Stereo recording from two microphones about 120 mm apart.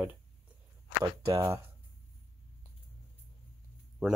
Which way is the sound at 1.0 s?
30° right (ahead or behind).